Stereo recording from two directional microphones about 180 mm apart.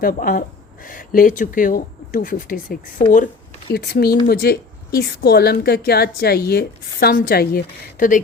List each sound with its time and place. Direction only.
0.0 s speech: 55° left (ahead or behind)
3.7 s a woman's voice: 60° left (ahead or behind)